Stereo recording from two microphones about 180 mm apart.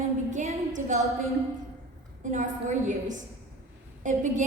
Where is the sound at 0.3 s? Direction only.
45° right (ahead or behind).